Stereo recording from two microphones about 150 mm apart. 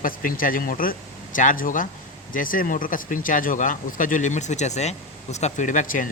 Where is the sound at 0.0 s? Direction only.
70° left (ahead or behind).